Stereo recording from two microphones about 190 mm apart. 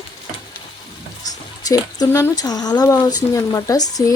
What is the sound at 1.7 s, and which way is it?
Speech, 15° left (ahead or behind).